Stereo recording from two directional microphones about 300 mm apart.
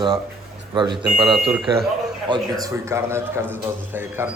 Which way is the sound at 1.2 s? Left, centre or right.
Centre.